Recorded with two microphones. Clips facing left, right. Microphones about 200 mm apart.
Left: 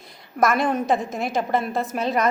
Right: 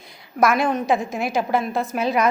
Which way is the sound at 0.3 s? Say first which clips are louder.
Right 1 dB; centre (ahead or behind).